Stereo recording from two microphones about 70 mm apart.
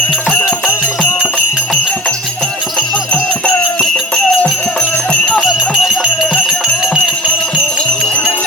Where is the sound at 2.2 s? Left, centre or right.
Centre.